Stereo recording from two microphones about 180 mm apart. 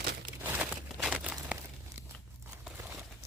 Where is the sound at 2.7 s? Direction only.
15° right (ahead or behind).